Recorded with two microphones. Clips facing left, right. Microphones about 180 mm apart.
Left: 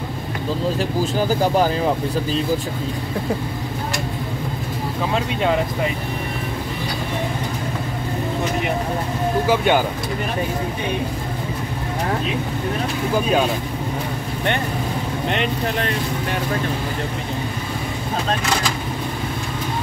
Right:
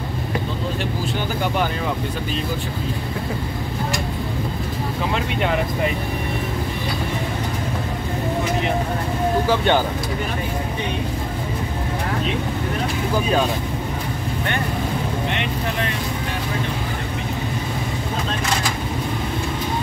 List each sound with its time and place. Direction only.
1.1 s speech: 35° left (ahead or behind)
9.5 s speech: 10° left (ahead or behind)